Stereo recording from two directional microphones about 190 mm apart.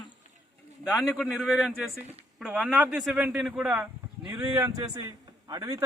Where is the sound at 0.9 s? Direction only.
Centre (ahead or behind).